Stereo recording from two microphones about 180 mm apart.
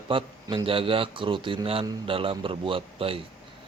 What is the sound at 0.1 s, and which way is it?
A man's voice, 30° right (ahead or behind).